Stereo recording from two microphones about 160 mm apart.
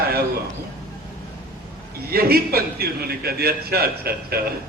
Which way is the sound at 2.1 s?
70° right (ahead or behind).